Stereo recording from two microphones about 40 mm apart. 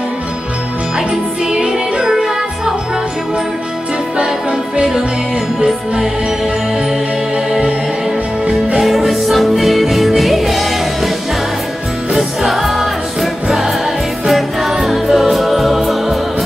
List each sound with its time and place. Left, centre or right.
0.9 s music: centre
4.2 s music: right
5.6 s music: centre
8.7 s music: centre
12.2 s music: centre